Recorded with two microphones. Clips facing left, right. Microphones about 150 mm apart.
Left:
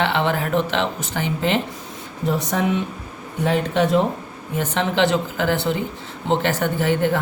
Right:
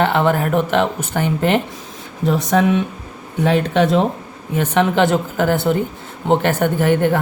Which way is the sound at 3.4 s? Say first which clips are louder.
Right 4 dB; 90° right.